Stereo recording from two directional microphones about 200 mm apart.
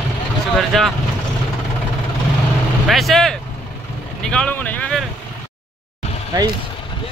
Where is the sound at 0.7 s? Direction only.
Centre (ahead or behind).